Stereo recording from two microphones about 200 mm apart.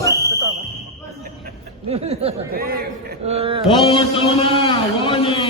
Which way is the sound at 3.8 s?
25° left (ahead or behind).